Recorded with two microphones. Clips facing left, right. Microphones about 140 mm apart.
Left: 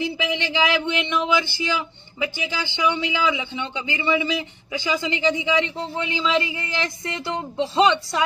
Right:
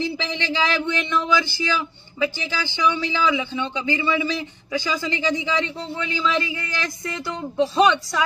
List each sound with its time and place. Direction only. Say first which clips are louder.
0.0 s speech: left 1 dB; 15° left (ahead or behind)